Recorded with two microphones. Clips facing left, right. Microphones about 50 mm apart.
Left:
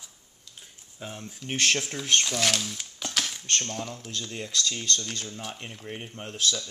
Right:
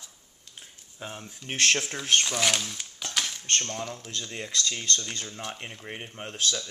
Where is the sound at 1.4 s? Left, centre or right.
Centre.